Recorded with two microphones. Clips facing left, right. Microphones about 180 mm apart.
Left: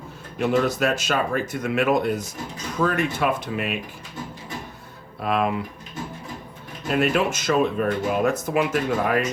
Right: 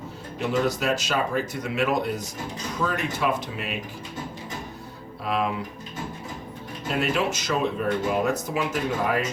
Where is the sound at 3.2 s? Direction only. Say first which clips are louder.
Left 1 dB; 55° left (ahead or behind).